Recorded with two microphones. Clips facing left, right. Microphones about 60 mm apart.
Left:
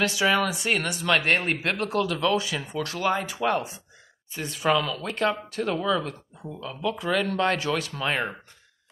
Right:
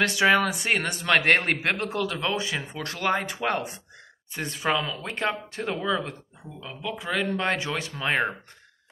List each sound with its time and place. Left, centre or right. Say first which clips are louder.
0.0 s speech: right 2 dB; right
1.7 s speech: left 1 dB; right
4.6 s speech: left 3 dB; right